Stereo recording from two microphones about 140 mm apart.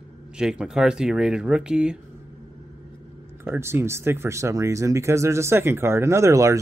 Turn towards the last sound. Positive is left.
turn(degrees=-20)  # may be behind; listen again after turning